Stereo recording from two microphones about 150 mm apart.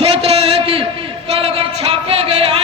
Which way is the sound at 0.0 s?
40° right (ahead or behind).